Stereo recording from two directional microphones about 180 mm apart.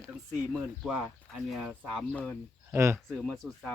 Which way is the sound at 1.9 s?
5° left (ahead or behind).